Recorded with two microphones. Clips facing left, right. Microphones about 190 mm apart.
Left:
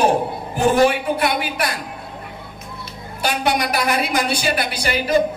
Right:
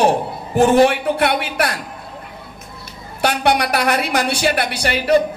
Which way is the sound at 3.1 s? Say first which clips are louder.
Right 3 dB; 65° right (ahead or behind).